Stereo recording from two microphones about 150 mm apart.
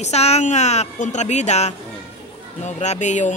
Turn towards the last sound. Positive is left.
turn(degrees=55)  # may be behind; listen again after turning